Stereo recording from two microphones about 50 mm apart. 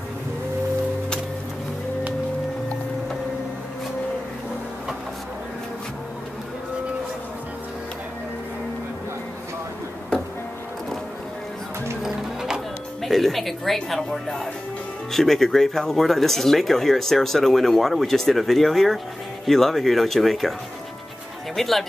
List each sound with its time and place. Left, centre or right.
12.0 s music: centre
13.0 s speech: centre
21.5 s speech: centre